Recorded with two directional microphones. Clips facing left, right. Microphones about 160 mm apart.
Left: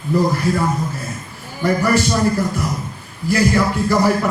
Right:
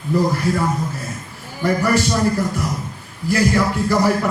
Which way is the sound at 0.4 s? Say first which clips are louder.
Left 1 dB; 20° left (ahead or behind).